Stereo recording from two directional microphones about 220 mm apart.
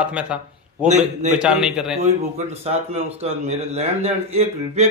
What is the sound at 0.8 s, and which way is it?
Speech, 30° right (ahead or behind).